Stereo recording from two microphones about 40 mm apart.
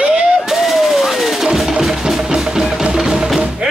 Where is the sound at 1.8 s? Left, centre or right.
Centre.